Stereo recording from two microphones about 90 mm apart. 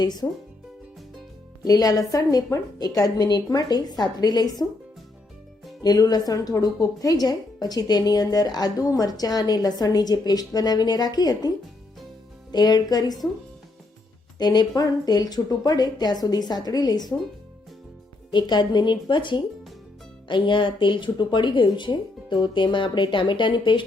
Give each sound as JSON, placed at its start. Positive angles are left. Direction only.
{"t": 0.0, "sound": "a woman's voice", "side_deg": 50}
{"t": 1.6, "sound": "a woman's voice", "side_deg": 40}
{"t": 5.8, "sound": "a woman's voice", "side_deg": 45}
{"t": 14.3, "sound": "a woman's voice", "side_deg": 50}
{"t": 18.3, "sound": "speech", "side_deg": 55}